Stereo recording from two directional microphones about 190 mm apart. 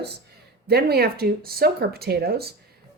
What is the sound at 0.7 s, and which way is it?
A woman's voice, 55° right (ahead or behind).